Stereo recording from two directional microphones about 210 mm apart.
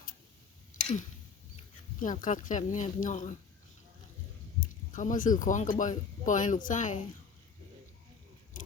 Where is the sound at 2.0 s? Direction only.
40° left (ahead or behind).